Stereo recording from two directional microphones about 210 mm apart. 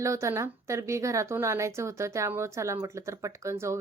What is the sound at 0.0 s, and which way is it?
A woman's voice, 15° right (ahead or behind).